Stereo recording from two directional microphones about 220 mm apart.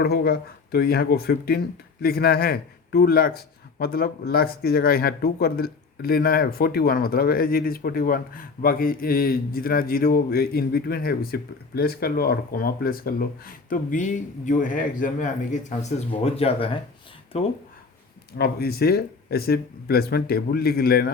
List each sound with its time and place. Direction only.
0.0 s speech: 45° left (ahead or behind); by 17.5 s 30° left (ahead or behind)
18.3 s speech: 45° left (ahead or behind)